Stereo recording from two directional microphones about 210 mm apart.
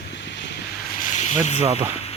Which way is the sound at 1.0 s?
35° left (ahead or behind).